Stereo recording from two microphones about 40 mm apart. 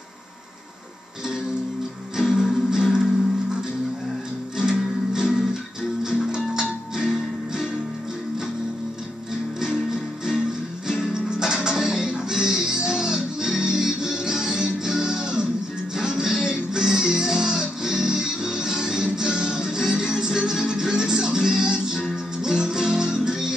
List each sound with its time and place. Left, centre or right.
2.1 s music: centre
4.6 s music: centre
9.6 s music: centre